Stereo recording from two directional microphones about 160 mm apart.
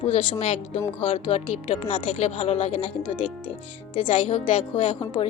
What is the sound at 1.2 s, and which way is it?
Speech, 45° left (ahead or behind).